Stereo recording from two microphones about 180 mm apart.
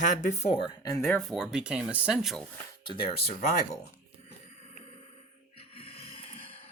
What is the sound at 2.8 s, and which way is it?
Speech, 30° left (ahead or behind).